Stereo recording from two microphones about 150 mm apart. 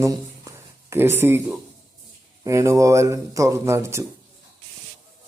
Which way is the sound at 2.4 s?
20° right (ahead or behind).